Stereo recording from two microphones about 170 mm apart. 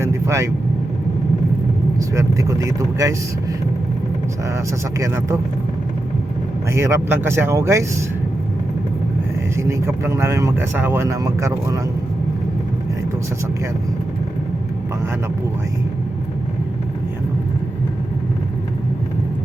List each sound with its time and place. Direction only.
0.0 s vehicle: 15° right (ahead or behind)
2.0 s speech: 15° right (ahead or behind)
4.9 s speech: 20° right (ahead or behind)
6.7 s speech: 15° right (ahead or behind)
9.6 s speech: 15° right (ahead or behind)